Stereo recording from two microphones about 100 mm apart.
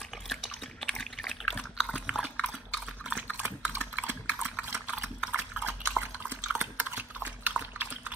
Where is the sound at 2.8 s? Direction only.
10° right (ahead or behind).